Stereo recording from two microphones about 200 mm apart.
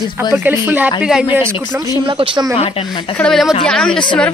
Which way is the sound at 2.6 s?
25° left (ahead or behind).